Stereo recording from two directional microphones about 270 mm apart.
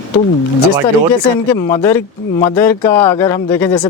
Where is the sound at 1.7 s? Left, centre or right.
Centre.